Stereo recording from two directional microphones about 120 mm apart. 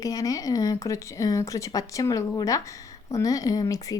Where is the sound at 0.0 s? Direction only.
30° left (ahead or behind).